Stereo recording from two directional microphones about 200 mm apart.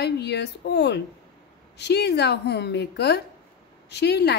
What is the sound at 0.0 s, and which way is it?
A woman's voice, 60° left (ahead or behind).